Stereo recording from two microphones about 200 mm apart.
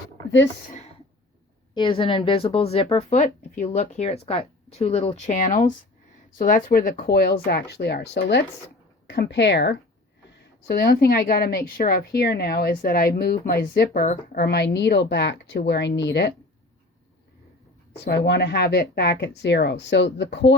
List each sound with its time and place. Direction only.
1.7 s speech: 25° left (ahead or behind)
6.4 s a woman's voice: 45° left (ahead or behind)
17.9 s speech: 60° left (ahead or behind)